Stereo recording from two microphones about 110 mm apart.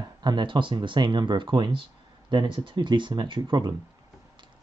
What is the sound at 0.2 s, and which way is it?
Speech, 45° right (ahead or behind).